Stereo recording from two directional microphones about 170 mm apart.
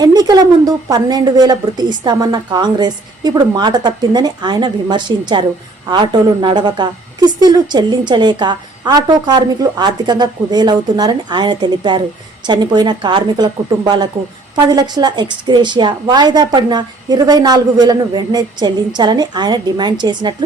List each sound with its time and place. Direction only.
0.0 s a woman's voice: 25° right (ahead or behind)